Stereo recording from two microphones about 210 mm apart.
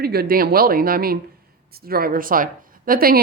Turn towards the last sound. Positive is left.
turn(degrees=-45)  # may be behind; listen again after turning